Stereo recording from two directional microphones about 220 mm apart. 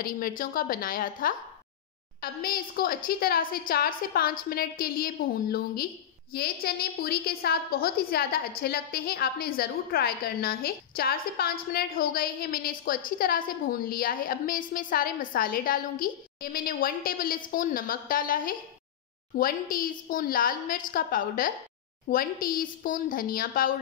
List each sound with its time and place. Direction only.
0.0 s a woman's voice: 40° left (ahead or behind)